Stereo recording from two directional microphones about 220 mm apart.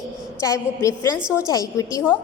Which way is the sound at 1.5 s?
15° left (ahead or behind).